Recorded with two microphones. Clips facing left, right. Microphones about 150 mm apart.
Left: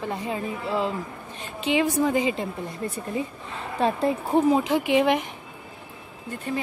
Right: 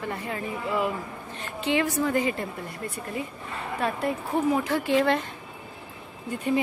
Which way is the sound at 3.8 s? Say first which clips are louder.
Left 5 dB; 25° left (ahead or behind).